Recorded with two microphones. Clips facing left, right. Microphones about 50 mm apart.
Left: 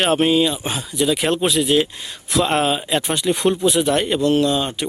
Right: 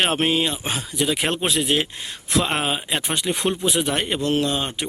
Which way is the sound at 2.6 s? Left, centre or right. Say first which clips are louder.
Left 5 dB; centre.